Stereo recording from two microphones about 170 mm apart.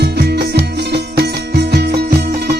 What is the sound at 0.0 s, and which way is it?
Music, 70° right (ahead or behind).